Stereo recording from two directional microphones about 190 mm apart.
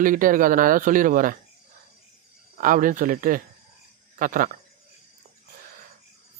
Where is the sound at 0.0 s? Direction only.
45° right (ahead or behind).